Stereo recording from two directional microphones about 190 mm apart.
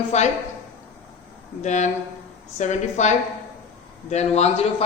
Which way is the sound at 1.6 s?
40° left (ahead or behind).